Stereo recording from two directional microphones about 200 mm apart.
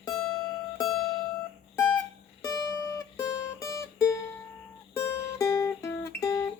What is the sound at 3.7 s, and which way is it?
Music, 15° left (ahead or behind).